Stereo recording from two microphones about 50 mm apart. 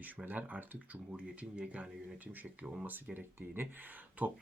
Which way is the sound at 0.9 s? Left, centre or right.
Right.